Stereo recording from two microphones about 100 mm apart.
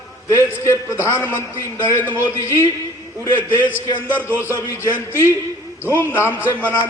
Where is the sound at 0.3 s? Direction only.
30° left (ahead or behind).